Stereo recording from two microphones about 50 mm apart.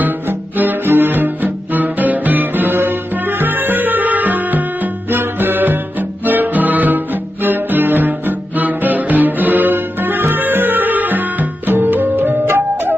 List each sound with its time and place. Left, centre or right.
0.0 s cello: right